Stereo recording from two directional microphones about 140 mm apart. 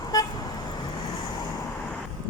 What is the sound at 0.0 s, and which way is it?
Vehicle, 25° left (ahead or behind).